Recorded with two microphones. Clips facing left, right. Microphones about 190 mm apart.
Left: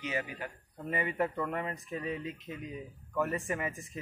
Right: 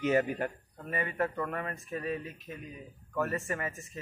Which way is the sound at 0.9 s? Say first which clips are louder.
Even; 20° left (ahead or behind).